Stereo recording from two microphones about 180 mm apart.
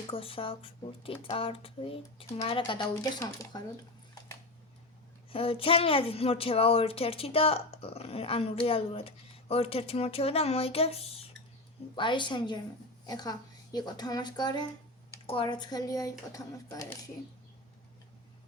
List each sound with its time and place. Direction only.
0.1 s speech: 30° left (ahead or behind)
5.3 s speech: 30° left (ahead or behind)